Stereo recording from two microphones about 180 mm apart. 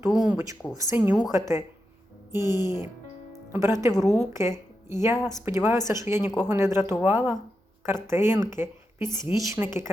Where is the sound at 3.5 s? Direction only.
15° right (ahead or behind).